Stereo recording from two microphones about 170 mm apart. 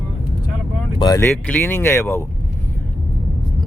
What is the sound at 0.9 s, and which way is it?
Speech, 20° left (ahead or behind).